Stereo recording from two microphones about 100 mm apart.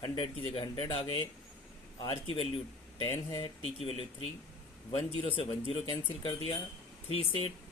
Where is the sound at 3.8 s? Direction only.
80° left.